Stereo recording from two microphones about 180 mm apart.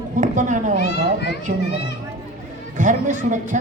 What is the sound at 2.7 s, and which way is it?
Speech, 45° right (ahead or behind).